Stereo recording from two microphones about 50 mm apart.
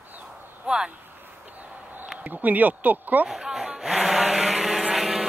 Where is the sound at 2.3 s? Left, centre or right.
Right.